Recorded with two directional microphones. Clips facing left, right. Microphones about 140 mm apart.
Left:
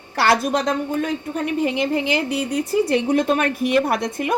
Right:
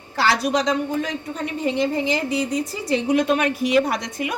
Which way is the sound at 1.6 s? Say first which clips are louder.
Right 1 dB; 65° left (ahead or behind).